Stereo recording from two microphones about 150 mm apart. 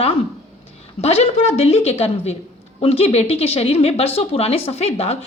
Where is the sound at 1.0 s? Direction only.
45° left (ahead or behind).